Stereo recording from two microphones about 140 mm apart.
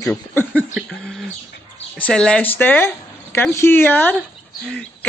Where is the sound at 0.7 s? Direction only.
Centre (ahead or behind).